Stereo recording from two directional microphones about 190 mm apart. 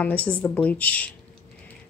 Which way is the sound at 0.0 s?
5° left (ahead or behind).